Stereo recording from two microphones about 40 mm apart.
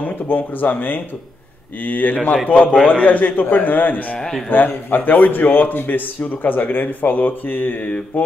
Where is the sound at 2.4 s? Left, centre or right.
Left.